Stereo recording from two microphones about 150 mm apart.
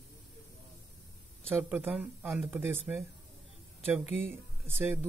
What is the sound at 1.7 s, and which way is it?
Speech, 10° right (ahead or behind).